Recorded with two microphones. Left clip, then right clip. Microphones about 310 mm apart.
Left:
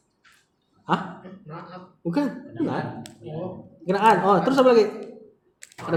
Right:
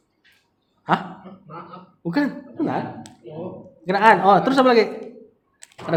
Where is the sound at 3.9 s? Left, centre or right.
Right.